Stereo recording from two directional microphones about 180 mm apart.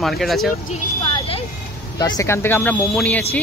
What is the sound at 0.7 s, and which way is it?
Speech, 30° left (ahead or behind).